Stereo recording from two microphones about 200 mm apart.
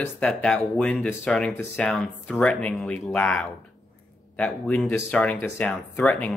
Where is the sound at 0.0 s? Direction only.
5° left (ahead or behind).